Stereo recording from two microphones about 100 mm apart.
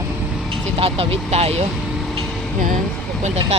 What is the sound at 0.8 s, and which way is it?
Speech, 75° right (ahead or behind).